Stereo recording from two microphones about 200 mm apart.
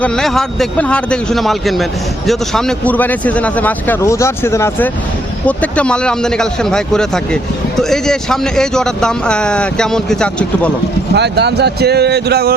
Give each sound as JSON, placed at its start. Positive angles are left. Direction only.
{"t": 0.0, "sound": "a man's voice", "side_deg": 0}
{"t": 11.1, "sound": "speech", "side_deg": -55}